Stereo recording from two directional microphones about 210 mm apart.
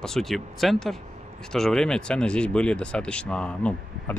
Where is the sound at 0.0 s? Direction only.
Centre (ahead or behind).